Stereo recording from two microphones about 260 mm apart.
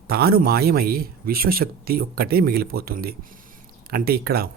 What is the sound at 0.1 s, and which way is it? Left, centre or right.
A man's voice, right.